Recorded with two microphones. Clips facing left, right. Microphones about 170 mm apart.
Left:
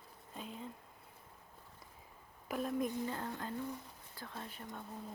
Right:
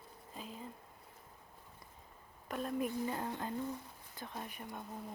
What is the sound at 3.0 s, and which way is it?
Speech, 15° right (ahead or behind).